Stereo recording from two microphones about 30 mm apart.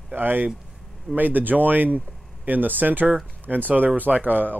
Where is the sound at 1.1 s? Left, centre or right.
Right.